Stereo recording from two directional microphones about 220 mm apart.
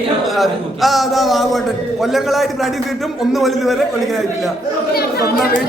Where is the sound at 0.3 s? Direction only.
Centre (ahead or behind).